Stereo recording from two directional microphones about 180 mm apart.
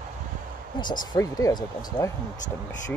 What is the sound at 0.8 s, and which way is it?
Speech, 20° left (ahead or behind).